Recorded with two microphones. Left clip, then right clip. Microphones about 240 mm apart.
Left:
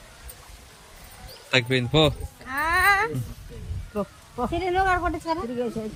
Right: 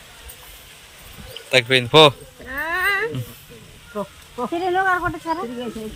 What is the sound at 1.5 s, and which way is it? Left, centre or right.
Speech, centre.